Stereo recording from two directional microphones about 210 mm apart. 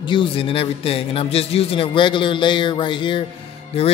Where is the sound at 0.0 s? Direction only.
25° left (ahead or behind).